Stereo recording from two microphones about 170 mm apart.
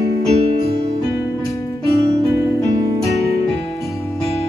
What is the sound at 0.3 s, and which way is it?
Music, 35° right (ahead or behind).